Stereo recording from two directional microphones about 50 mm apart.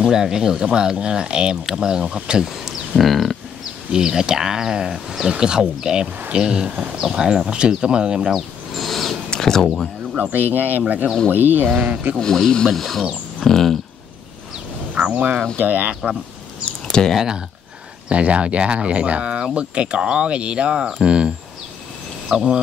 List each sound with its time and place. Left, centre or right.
0.0 s speech: centre
3.0 s speech: centre
3.9 s speech: centre
5.3 s speech: centre
8.3 s speech: centre
10.3 s speech: right
12.2 s speech: centre
15.0 s speech: right
16.9 s speech: centre
18.0 s speech: right
22.3 s speech: centre